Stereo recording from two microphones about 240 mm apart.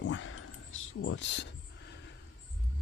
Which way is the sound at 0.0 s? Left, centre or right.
Left.